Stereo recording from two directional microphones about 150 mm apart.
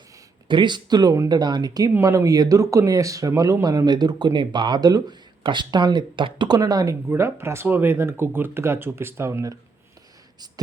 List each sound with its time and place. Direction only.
0.4 s speech: 30° right (ahead or behind)